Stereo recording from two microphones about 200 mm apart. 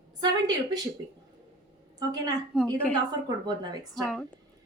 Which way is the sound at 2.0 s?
20° right (ahead or behind).